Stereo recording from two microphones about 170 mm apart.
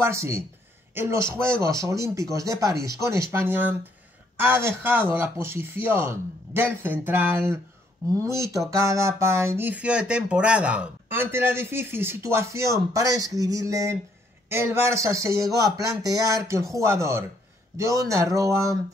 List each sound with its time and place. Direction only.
0.0 s speech: 15° right (ahead or behind)